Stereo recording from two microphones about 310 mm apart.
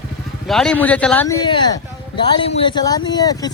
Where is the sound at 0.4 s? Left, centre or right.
Centre.